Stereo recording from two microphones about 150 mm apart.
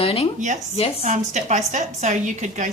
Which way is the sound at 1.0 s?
55° right (ahead or behind).